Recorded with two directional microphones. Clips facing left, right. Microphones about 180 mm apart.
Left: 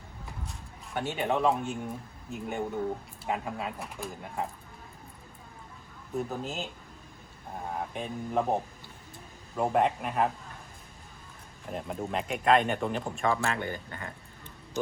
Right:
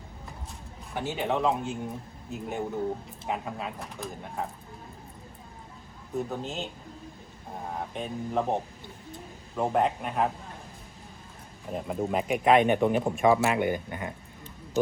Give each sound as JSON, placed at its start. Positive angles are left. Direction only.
{"t": 0.9, "sound": "speech", "side_deg": 0}
{"t": 6.1, "sound": "speech", "side_deg": 0}
{"t": 7.7, "sound": "speech", "side_deg": 0}
{"t": 11.7, "sound": "speech", "side_deg": 0}
{"t": 13.2, "sound": "speech", "side_deg": -15}